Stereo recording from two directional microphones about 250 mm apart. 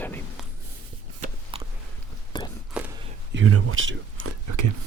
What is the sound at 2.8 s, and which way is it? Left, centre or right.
Whispering, centre.